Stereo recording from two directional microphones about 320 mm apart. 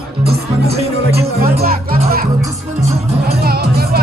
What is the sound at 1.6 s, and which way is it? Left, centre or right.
Music, right.